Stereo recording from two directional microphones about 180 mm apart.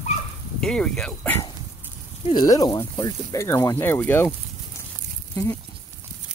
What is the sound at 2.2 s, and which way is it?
Speech, 25° left (ahead or behind).